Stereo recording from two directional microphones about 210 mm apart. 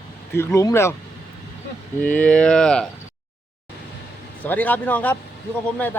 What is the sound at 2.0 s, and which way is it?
Speech, 5° left (ahead or behind).